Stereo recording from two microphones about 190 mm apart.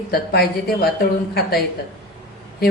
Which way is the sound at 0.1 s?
55° left (ahead or behind).